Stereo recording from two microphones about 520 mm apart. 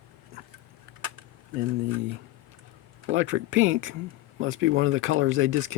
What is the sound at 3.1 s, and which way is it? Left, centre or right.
Speech, right.